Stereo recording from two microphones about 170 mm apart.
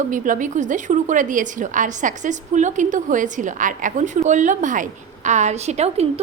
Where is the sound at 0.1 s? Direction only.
50° right (ahead or behind).